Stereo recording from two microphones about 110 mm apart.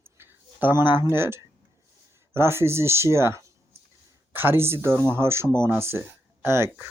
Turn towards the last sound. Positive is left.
turn(degrees=-20)  # may be behind; listen again after turning